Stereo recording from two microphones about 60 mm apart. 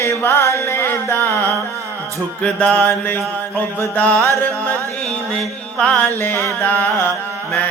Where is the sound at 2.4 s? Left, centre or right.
Left.